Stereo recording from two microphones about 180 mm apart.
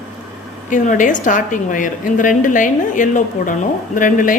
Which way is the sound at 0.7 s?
45° left (ahead or behind).